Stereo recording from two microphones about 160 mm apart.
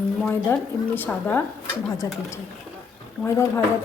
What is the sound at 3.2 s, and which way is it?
Speech, 15° left (ahead or behind).